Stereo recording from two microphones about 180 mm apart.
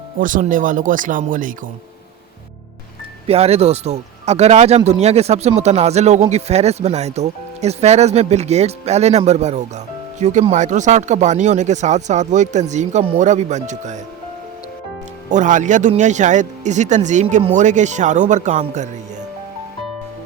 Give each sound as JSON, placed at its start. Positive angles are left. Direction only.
{"t": 0.2, "sound": "speech", "side_deg": -50}
{"t": 3.2, "sound": "speech", "side_deg": -35}
{"t": 15.3, "sound": "speech", "side_deg": -45}